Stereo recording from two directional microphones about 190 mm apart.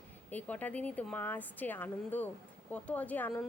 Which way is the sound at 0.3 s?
10° left (ahead or behind).